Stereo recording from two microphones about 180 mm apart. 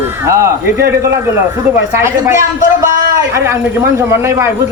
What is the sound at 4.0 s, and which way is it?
Speech, 15° right (ahead or behind).